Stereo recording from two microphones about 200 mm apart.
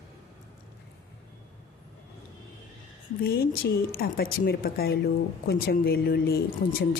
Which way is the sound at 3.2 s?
50° left (ahead or behind).